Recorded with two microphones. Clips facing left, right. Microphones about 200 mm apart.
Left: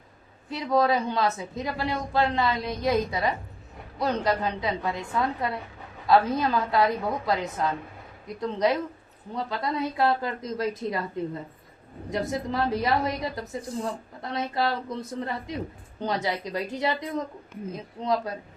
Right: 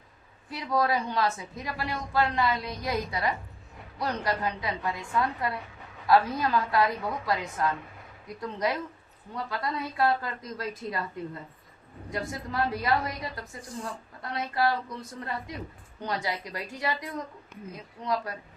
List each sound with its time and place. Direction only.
0.5 s a woman's voice: 25° left (ahead or behind)
12.1 s a woman's voice: 20° left (ahead or behind)